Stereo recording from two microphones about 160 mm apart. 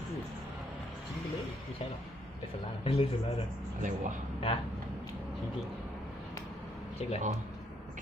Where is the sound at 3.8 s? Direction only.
55° right (ahead or behind).